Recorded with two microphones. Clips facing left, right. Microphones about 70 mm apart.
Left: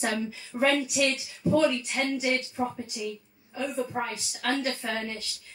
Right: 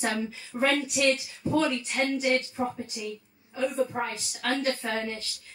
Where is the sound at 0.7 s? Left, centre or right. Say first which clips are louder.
Right 1 dB; right.